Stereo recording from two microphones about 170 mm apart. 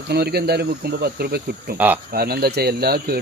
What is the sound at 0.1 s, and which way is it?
Speech, 70° right (ahead or behind).